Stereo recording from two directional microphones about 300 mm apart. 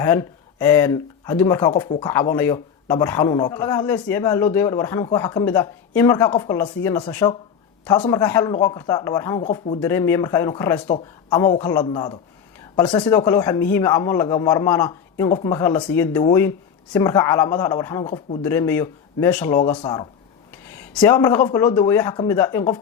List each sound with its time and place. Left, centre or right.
0.0 s speech: centre
9.8 s speech: centre